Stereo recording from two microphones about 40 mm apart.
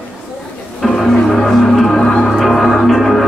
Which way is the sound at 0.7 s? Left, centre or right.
Centre.